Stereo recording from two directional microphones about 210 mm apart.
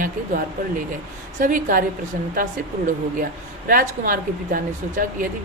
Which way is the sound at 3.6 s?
45° right (ahead or behind).